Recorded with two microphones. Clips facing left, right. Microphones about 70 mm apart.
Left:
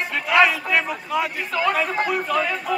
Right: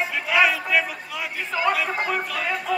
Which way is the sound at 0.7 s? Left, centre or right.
Centre.